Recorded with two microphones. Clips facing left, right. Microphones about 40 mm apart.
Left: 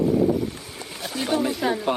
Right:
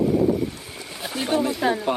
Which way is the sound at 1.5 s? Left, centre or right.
Centre.